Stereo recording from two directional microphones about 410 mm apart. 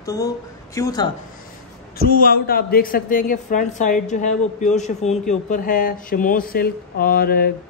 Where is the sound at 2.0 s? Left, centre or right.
Left.